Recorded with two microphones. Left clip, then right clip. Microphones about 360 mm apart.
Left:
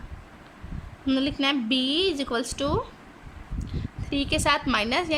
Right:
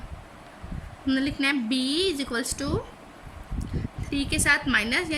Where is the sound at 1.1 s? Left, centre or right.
Centre.